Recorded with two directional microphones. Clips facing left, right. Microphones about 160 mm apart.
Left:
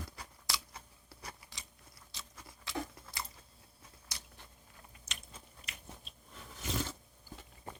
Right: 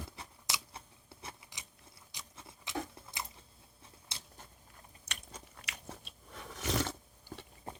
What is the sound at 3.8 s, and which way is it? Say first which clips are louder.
Biting: right 1 dB; 25° right (ahead or behind).